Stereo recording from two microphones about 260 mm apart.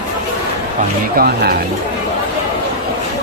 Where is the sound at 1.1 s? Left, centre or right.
Right.